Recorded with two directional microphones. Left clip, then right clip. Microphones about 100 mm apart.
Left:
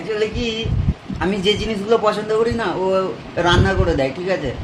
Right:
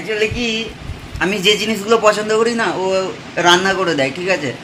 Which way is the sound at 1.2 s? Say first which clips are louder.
Right 4 dB; 20° right (ahead or behind).